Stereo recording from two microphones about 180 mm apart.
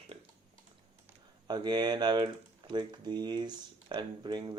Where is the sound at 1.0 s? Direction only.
25° right (ahead or behind).